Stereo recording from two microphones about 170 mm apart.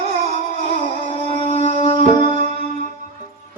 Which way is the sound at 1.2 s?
45° right (ahead or behind).